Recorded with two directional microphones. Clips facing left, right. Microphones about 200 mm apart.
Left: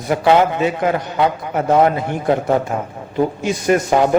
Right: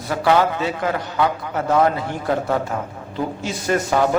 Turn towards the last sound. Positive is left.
turn(degrees=15)  # may be behind; listen again after turning